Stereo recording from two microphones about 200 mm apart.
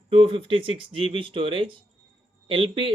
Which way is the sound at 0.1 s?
25° right (ahead or behind).